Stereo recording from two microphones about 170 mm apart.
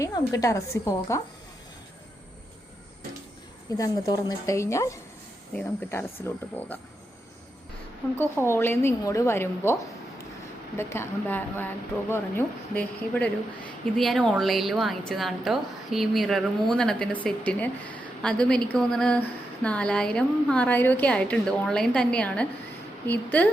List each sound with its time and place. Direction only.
0.0 s a woman's voice: 20° left (ahead or behind)
3.8 s speech: 20° left (ahead or behind)
8.2 s speech: 15° left (ahead or behind)
10.8 s a woman's voice: 15° left (ahead or behind)